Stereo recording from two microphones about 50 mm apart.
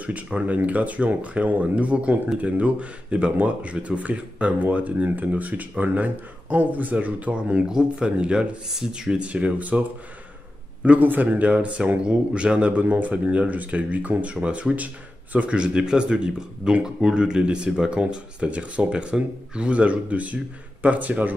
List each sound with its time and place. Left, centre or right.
0.0 s speech: right
7.6 s speech: centre
8.6 s speech: centre; by 9.8 s right
11.0 s speech: right